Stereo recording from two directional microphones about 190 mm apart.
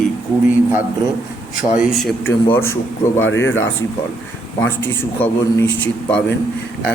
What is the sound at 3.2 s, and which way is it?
Speech, 90° left.